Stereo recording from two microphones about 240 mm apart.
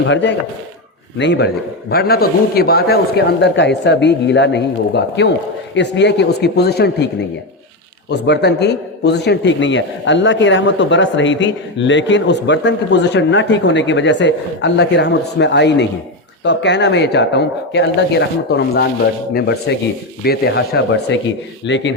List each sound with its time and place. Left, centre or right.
0.0 s a man's voice: left